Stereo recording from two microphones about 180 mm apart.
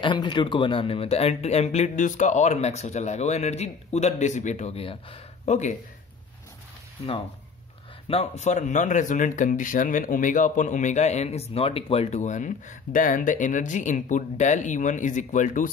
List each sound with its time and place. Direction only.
0.0 s speech: 25° left (ahead or behind)
8.1 s speech: 40° left (ahead or behind)